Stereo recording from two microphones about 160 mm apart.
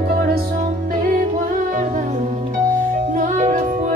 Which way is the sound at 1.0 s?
60° right (ahead or behind).